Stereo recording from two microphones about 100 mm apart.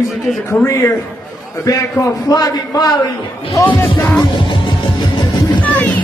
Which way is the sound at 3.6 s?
20° left (ahead or behind).